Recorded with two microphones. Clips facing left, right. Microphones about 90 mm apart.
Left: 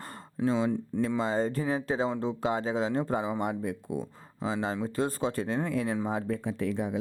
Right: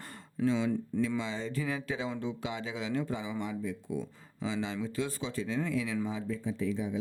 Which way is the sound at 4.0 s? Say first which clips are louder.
Left 3 dB; 45° left (ahead or behind).